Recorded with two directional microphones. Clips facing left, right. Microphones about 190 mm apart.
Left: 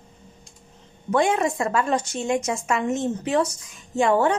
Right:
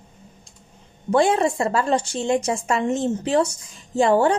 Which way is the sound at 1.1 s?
30° right (ahead or behind).